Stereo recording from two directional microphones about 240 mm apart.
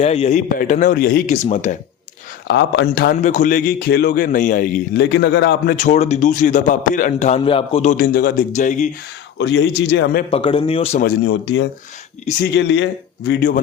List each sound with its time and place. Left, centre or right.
0.0 s a man's voice: left
2.5 s a man's voice: left
9.4 s a man's voice: left
10.3 s speech: left
11.0 s a man's voice: left